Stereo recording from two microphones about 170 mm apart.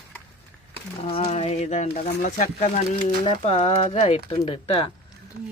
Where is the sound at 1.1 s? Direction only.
35° left (ahead or behind).